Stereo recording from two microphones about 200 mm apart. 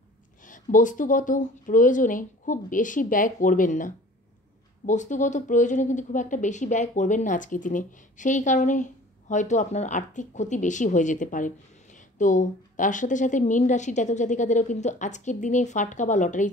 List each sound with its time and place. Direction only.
0.4 s speech: 40° left (ahead or behind)